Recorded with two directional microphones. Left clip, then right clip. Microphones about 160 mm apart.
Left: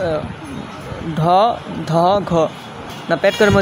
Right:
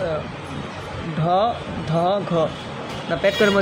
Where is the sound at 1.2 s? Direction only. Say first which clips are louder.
Left 6 dB; 35° left (ahead or behind).